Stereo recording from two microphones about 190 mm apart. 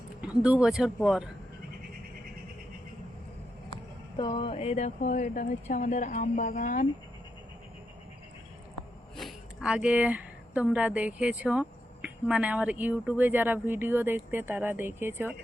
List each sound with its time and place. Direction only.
0.2 s a man's voice: 5° right (ahead or behind)
4.2 s speech: 25° left (ahead or behind); by 6.8 s 40° left (ahead or behind)
9.1 s speech: centre (ahead or behind)